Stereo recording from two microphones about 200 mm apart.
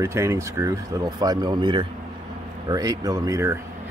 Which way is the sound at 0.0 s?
15° right (ahead or behind).